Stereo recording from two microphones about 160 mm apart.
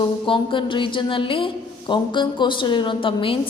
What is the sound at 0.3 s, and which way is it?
A woman's voice, 30° left (ahead or behind).